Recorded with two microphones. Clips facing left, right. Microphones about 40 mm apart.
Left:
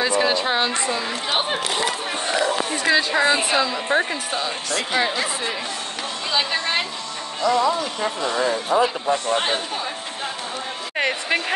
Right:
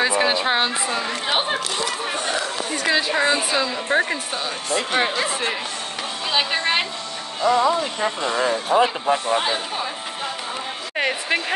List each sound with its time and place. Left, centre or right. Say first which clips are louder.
0.0 s a sound: right 1 dB; centre
0.9 s speech: right 1 dB; centre
2.9 s a woman's voice: left 1 dB; centre
3.3 s a woman's voice: left 2 dB; left
3.7 s a woman's voice: even; centre
4.6 s speech: right 2 dB; right
6.3 s a woman's voice: right 1 dB; right
8.7 s speech: right 2 dB; right
11.0 s a woman's voice: even; centre